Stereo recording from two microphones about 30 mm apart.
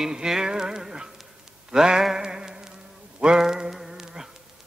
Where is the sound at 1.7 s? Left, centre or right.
Centre.